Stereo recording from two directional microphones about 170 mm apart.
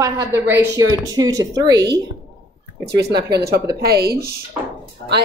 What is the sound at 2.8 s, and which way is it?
A woman's voice, 75° right (ahead or behind).